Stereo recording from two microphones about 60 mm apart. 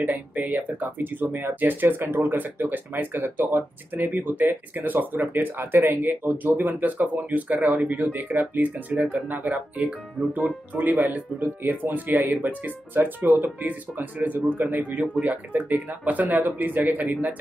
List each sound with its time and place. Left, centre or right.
0.0 s speech: right